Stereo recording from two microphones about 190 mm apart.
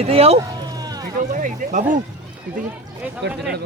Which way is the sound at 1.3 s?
40° right (ahead or behind).